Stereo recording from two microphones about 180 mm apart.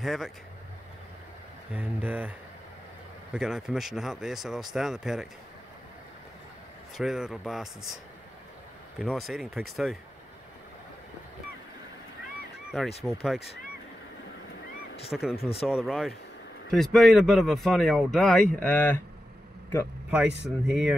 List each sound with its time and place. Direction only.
0.0 s speech: centre (ahead or behind)
1.7 s speech: 10° right (ahead or behind)
3.3 s speech: 5° right (ahead or behind)
7.0 s speech: centre (ahead or behind)
9.0 s speech: centre (ahead or behind)
12.7 s speech: centre (ahead or behind)
14.7 s honk: 60° left (ahead or behind)
15.3 s speech: 35° left (ahead or behind)
15.6 s speech: centre (ahead or behind)
20.1 s speech: 5° right (ahead or behind)